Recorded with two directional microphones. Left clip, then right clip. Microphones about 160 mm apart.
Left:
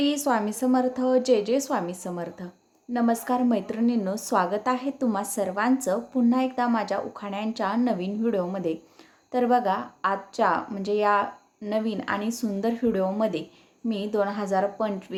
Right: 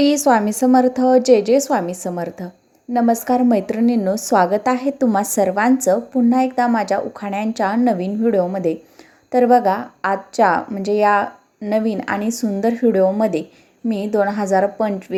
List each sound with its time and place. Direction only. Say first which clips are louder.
0.0 s a woman's voice: right 10 dB; 30° right (ahead or behind)